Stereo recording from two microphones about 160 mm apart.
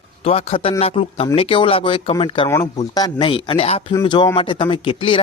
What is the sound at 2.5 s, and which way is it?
Speech, 25° left (ahead or behind).